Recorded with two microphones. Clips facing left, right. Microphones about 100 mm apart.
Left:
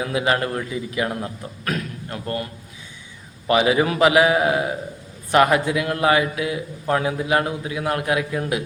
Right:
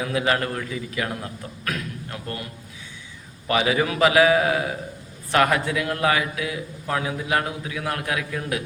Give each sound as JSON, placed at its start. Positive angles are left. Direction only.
{"t": 0.0, "sound": "a man's voice", "side_deg": 25}
{"t": 3.4, "sound": "a man's voice", "side_deg": 25}